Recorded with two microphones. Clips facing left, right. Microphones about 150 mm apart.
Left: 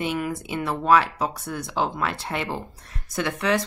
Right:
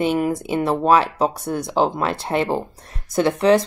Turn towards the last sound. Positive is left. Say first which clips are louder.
# right 8 dB
turn(degrees=-35)  # may be behind; listen again after turning